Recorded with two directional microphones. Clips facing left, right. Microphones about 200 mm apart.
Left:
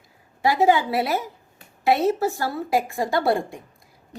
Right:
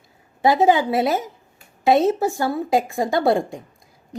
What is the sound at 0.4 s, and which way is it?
A woman's voice, 20° right (ahead or behind).